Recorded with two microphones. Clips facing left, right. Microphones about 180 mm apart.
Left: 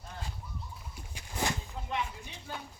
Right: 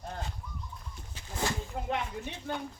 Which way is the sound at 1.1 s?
15° left (ahead or behind).